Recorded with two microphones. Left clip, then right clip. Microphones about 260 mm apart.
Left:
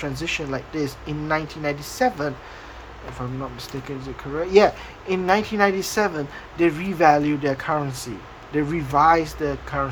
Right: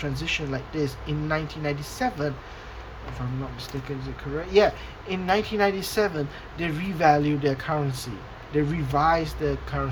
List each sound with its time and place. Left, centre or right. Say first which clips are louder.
0.0 s speech: left 2 dB; centre
4.4 s a woman's voice: left 4 dB; left